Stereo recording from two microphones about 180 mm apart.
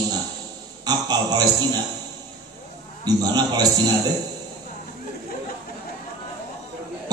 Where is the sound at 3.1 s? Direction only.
20° right (ahead or behind).